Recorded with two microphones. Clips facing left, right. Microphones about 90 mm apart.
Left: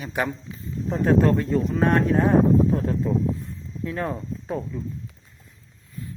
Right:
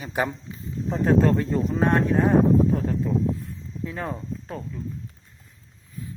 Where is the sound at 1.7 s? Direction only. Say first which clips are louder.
Even; 20° right (ahead or behind).